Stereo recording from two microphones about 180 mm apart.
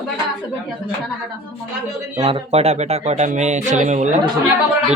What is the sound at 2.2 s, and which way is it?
Speech, 30° right (ahead or behind).